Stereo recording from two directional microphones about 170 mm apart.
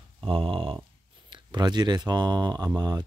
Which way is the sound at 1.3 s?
25° right (ahead or behind).